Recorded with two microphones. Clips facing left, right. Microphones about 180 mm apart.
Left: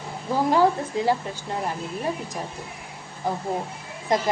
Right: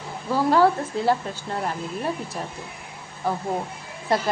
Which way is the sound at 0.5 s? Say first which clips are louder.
Right 1 dB; 15° left (ahead or behind).